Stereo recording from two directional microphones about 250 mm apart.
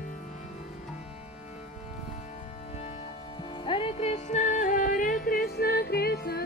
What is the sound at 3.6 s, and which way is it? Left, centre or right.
Music, left.